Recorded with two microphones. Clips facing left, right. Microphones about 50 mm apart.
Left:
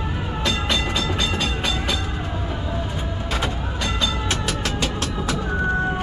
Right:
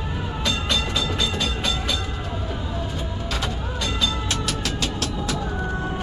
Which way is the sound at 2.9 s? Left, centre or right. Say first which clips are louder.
Left 2 dB; left.